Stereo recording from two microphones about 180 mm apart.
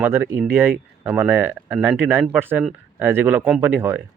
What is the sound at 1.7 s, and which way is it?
Speech, 5° right (ahead or behind).